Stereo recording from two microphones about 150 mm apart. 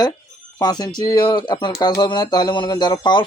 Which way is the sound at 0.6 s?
25° left (ahead or behind).